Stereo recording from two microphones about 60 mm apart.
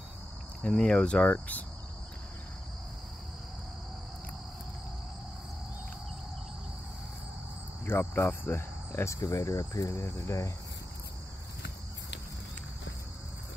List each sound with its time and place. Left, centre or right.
0.6 s speech: centre
7.8 s cricket: left
9.0 s speech: left
9.9 s cricket: left